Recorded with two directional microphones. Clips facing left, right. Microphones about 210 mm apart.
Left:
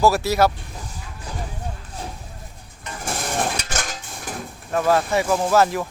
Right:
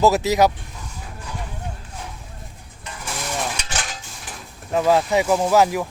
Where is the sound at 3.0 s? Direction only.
50° left (ahead or behind).